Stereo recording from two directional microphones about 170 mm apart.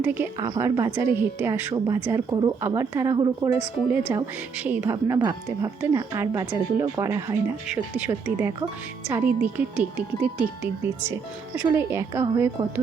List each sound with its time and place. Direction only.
0.0 s a woman's voice: 10° right (ahead or behind)
0.3 s a woman's voice: 25° right (ahead or behind)
4.1 s a woman's voice: 10° right (ahead or behind)